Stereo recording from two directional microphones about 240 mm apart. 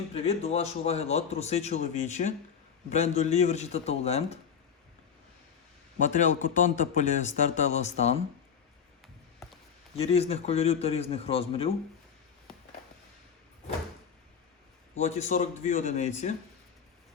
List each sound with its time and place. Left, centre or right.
0.1 s a man's voice: left
6.0 s speech: left
10.0 s a man's voice: left
14.9 s a man's voice: left